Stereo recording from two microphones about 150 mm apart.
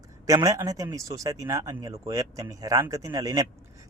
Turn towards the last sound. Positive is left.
turn(degrees=-25)  # may be behind; listen again after turning